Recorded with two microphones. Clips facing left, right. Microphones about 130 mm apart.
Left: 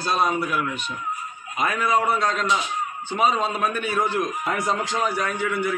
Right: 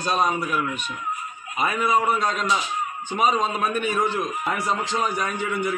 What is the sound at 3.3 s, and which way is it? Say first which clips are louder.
Speech: right 1 dB; centre (ahead or behind).